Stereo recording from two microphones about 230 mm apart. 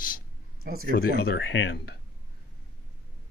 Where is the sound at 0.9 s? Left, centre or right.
Left.